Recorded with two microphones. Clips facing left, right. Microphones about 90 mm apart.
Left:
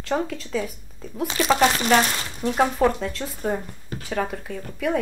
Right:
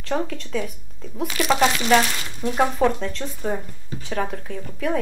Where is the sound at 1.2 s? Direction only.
30° left (ahead or behind).